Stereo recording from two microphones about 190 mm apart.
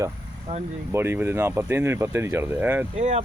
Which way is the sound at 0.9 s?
15° right (ahead or behind).